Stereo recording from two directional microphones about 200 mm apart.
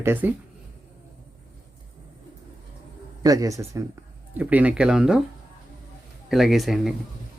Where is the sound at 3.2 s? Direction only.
15° right (ahead or behind).